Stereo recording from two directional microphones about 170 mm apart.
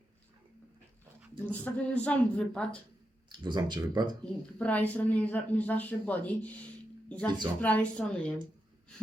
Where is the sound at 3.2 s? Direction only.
25° right (ahead or behind).